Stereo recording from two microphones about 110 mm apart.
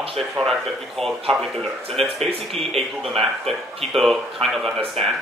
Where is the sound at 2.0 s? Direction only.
65° right (ahead or behind).